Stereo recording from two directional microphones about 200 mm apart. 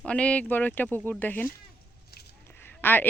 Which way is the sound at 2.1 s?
50° left (ahead or behind).